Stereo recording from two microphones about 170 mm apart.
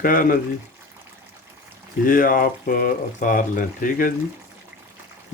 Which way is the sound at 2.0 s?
55° left (ahead or behind).